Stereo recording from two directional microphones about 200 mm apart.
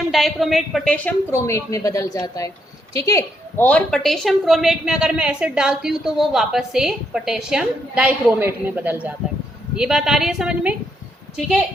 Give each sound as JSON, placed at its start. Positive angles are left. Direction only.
{"t": 0.1, "sound": "a woman's voice", "side_deg": 0}